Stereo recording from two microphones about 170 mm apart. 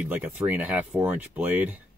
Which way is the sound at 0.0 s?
10° right (ahead or behind).